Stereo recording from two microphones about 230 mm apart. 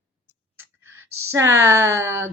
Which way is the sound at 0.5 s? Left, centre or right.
Centre.